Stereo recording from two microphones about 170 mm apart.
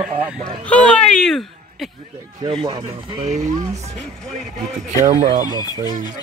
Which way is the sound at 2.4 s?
25° right (ahead or behind).